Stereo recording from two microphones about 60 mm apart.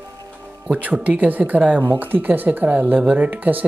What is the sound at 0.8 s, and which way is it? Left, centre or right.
Speech, right.